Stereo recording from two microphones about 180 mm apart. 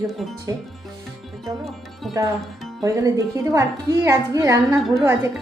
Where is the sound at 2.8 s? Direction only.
20° right (ahead or behind).